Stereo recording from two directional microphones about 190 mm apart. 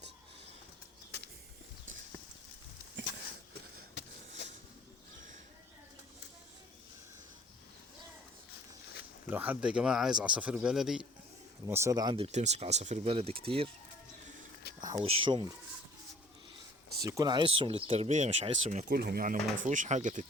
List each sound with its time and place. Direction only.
9.3 s speech: 10° right (ahead or behind)
11.6 s speech: 15° right (ahead or behind); by 13.7 s 30° right (ahead or behind)
14.8 s a sound: 20° right (ahead or behind)
15.0 s speech: 25° right (ahead or behind)
17.0 s speech: 20° right (ahead or behind); by 18.9 s 40° right (ahead or behind)
18.9 s speech: 55° right (ahead or behind)